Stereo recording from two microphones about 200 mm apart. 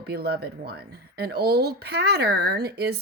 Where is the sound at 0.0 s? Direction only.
50° right (ahead or behind).